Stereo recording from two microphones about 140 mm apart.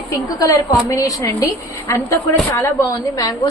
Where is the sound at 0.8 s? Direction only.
25° left (ahead or behind).